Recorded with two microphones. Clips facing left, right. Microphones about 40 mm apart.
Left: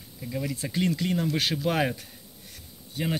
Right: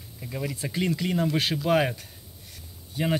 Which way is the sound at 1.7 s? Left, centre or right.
Centre.